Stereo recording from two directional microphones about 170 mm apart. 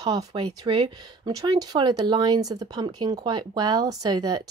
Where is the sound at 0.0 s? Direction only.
20° right (ahead or behind).